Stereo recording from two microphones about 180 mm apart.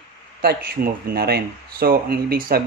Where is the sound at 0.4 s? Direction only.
60° right (ahead or behind).